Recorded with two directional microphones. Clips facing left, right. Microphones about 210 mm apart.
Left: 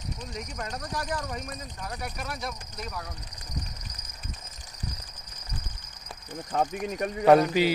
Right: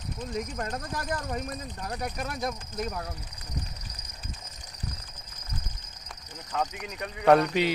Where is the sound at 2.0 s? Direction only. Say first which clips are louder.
Right 4 dB; 45° right (ahead or behind).